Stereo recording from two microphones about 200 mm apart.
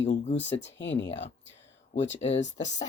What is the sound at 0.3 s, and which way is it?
Speech, 65° left (ahead or behind).